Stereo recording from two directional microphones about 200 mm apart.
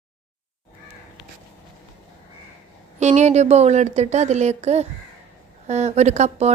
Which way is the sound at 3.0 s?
35° right (ahead or behind).